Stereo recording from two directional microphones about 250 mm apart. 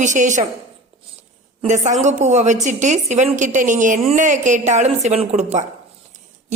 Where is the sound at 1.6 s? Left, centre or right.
Right.